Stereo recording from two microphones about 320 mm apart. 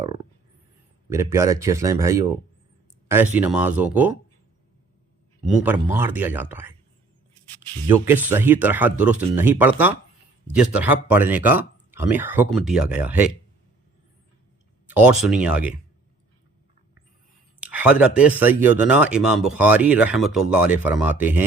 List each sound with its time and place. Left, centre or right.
0.0 s a sound: centre
1.1 s speech: centre
5.5 s speech: centre
7.9 s speech: centre
14.8 s speech: centre
17.7 s speech: centre